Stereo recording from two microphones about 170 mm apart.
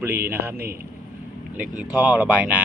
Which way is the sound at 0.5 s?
60° right (ahead or behind).